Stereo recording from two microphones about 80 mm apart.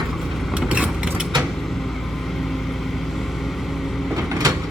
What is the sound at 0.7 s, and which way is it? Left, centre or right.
Vehicle, centre.